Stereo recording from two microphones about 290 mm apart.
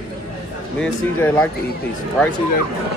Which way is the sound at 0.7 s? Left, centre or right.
Centre.